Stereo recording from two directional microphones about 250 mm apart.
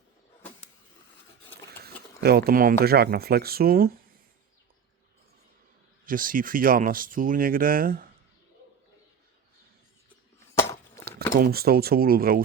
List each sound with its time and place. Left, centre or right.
2.2 s speech: right
6.1 s speech: right
10.5 s a sound: centre
11.3 s speech: right